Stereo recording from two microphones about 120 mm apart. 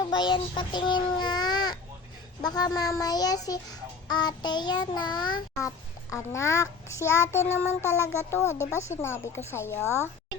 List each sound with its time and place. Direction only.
0.1 s speech: 40° left (ahead or behind)
2.4 s child singing: 35° left (ahead or behind)
6.1 s child singing: 25° left (ahead or behind)